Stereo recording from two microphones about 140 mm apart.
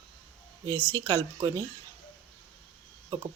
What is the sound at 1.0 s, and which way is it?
Speech, 20° right (ahead or behind).